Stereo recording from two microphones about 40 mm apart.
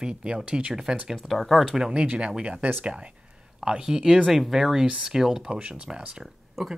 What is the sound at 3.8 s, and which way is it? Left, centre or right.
Speech, centre.